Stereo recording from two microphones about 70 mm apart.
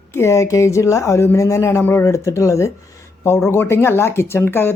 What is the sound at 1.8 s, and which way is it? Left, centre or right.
Speech, left.